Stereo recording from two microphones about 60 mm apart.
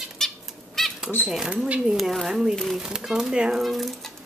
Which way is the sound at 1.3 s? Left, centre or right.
Centre.